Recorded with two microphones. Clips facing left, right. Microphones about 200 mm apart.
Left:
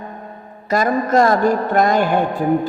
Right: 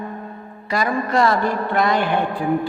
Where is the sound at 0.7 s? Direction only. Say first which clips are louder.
Left 4 dB; 45° left (ahead or behind).